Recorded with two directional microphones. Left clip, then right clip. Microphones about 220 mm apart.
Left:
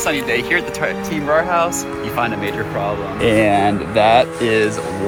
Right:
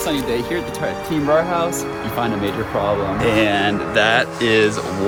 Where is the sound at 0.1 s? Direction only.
5° right (ahead or behind).